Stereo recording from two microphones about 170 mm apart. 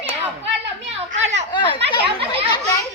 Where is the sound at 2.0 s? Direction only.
35° right (ahead or behind).